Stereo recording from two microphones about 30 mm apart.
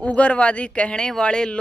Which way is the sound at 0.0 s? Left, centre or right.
Left.